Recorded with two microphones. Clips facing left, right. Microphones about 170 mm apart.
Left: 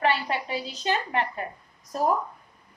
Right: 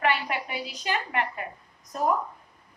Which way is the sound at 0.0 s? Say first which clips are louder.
Left 1 dB; 30° left (ahead or behind).